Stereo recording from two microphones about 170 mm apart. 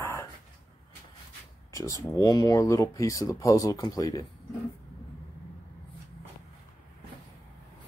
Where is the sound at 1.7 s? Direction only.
20° left (ahead or behind).